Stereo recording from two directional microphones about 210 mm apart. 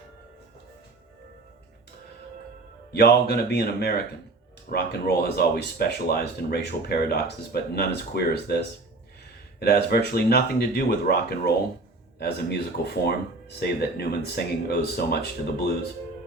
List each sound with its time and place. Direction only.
2.9 s speech: 50° left (ahead or behind)
9.6 s speech: 45° left (ahead or behind)